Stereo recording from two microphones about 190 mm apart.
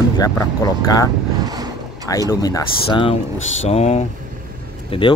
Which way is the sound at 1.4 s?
20° right (ahead or behind).